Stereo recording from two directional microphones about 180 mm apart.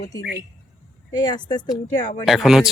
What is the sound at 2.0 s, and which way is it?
Speech, 40° left (ahead or behind).